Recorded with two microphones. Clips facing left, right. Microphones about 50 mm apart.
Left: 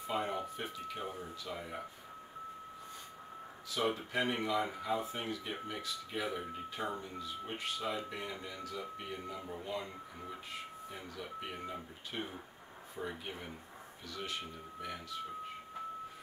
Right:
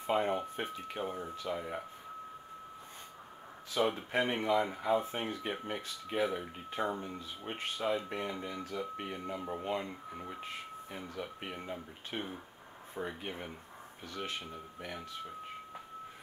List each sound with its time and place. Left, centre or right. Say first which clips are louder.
0.1 s speech: right 5 dB; right
3.8 s speech: right 3 dB; right